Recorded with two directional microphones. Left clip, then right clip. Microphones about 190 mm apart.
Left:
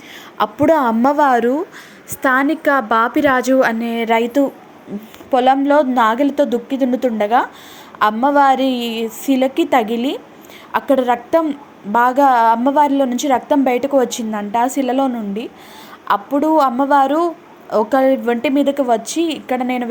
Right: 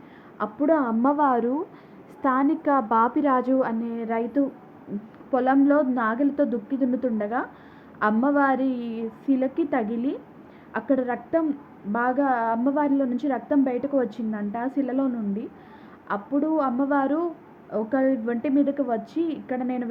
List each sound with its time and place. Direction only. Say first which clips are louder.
0.6 s a woman's voice: left 8 dB; 30° left (ahead or behind)